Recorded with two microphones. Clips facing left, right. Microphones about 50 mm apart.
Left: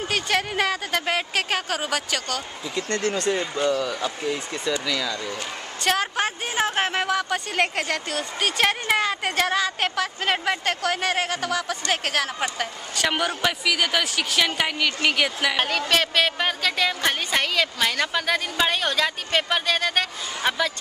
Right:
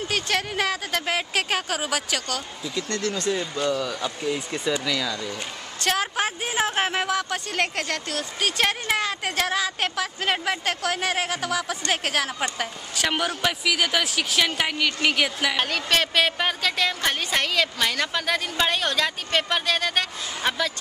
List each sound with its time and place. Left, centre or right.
0.1 s speech: centre
2.7 s speech: left
3.8 s speech: centre
4.5 s speech: centre